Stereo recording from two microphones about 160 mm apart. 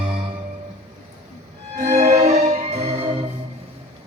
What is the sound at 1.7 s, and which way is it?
Music, 50° right (ahead or behind).